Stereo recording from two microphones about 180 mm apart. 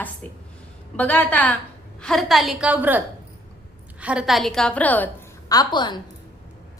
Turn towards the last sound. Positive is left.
turn(degrees=25)  # may be behind; listen again after turning